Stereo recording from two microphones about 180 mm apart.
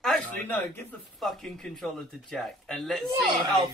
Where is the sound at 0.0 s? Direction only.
5° left (ahead or behind).